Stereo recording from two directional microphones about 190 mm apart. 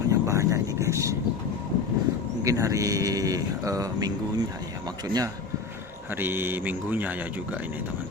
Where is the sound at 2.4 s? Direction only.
15° right (ahead or behind).